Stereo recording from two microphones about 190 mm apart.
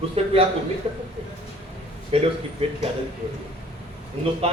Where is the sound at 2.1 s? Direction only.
30° right (ahead or behind).